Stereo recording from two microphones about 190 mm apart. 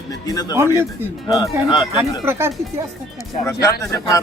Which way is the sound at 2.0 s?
10° right (ahead or behind).